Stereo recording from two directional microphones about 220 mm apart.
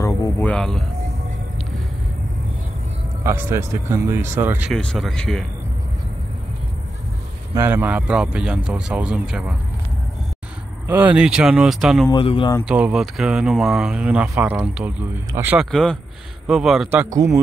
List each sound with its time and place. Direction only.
0.0 s speech: 10° left (ahead or behind)
3.3 s speech: 10° right (ahead or behind)
7.5 s speech: 10° right (ahead or behind)
10.9 s speech: 5° right (ahead or behind)
12.1 s speech: 25° left (ahead or behind)
12.6 s speech: 5° right (ahead or behind)
17.1 s speech: 15° right (ahead or behind)